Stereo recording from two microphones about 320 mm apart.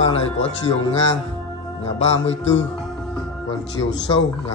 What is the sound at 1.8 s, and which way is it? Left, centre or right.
Speech, left.